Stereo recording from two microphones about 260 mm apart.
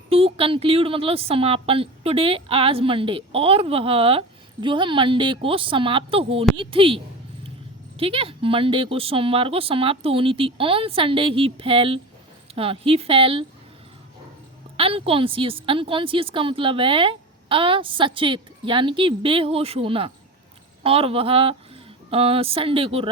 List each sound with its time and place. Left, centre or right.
0.1 s a woman's voice: right
14.8 s a woman's voice: right